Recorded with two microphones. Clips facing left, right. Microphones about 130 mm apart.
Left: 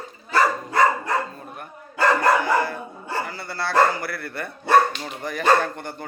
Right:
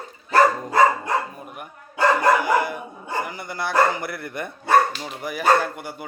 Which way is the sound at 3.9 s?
20° right (ahead or behind).